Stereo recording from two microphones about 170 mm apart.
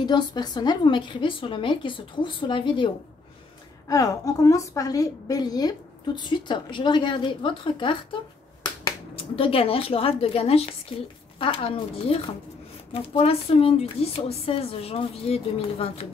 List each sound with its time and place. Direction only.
0.0 s a woman's voice: 25° left (ahead or behind)
3.9 s a woman's voice: 20° left (ahead or behind); by 15.9 s 35° left (ahead or behind)